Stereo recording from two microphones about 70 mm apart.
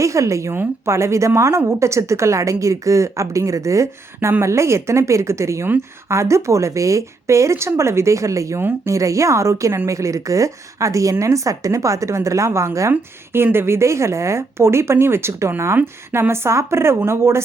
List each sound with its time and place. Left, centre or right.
0.0 s a woman's voice: right
12.9 s a woman's voice: right